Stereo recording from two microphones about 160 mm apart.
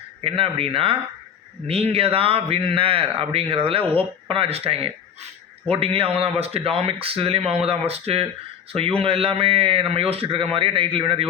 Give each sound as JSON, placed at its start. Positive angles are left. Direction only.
{"t": 0.3, "sound": "speech", "side_deg": -35}